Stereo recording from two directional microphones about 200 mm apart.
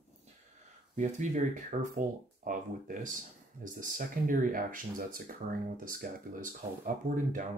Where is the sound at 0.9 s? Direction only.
35° right (ahead or behind).